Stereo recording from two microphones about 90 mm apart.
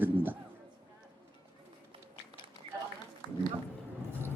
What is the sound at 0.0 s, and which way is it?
Music, 20° right (ahead or behind).